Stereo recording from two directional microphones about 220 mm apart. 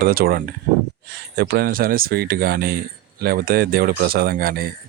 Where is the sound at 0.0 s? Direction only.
45° right (ahead or behind).